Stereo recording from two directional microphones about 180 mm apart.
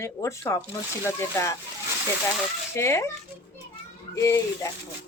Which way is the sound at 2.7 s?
15° left (ahead or behind).